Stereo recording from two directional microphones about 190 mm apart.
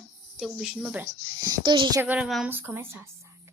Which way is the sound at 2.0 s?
5° right (ahead or behind).